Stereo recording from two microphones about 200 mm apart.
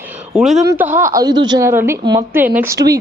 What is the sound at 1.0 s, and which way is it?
A woman's voice, 15° right (ahead or behind).